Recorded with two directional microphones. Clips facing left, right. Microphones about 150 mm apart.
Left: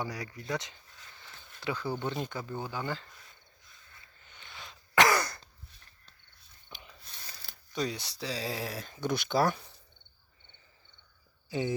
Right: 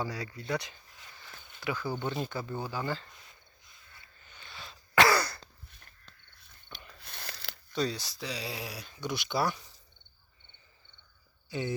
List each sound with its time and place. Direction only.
0.0 s speech: 20° left (ahead or behind)
1.8 s speech: 10° right (ahead or behind)
2.2 s speech: 15° left (ahead or behind)
4.2 s throat clearing: 20° left (ahead or behind)
6.7 s a sound: 10° left (ahead or behind)
7.0 s a sound: 70° right (ahead or behind)
7.7 s speech: 20° left (ahead or behind)
8.2 s speech: 40° left (ahead or behind)